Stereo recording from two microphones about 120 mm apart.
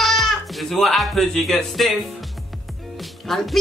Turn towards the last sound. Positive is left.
turn(degrees=0)  # may be behind; listen again after turning